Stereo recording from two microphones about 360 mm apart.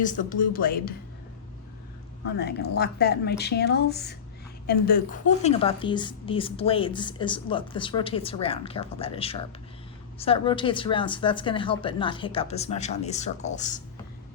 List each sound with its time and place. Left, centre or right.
0.0 s a woman's voice: left
2.4 s a woman's voice: left